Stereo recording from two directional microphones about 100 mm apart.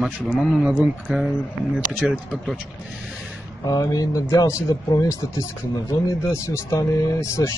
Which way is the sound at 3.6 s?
40° left (ahead or behind).